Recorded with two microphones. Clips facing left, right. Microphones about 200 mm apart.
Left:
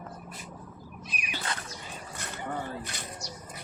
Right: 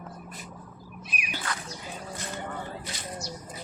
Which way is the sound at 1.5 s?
25° left (ahead or behind).